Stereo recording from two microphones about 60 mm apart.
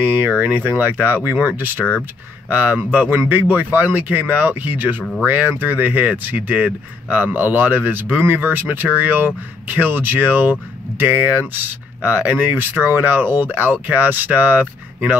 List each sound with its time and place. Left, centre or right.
0.0 s speech: right